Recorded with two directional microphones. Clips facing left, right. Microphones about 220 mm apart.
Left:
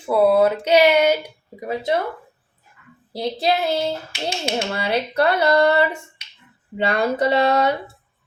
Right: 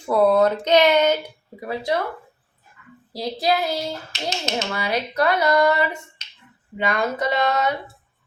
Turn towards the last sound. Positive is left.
turn(degrees=30)  # may be behind; listen again after turning